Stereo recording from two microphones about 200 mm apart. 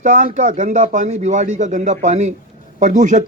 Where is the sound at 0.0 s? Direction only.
35° right (ahead or behind).